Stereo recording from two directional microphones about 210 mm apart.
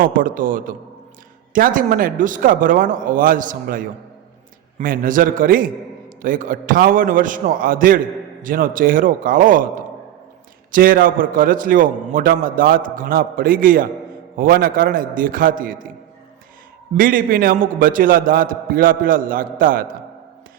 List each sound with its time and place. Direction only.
0.0 s a man's voice: 40° right (ahead or behind)
16.9 s a man's voice: 40° right (ahead or behind)